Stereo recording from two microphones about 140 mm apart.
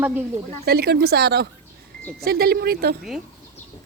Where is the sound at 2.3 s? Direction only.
90° right.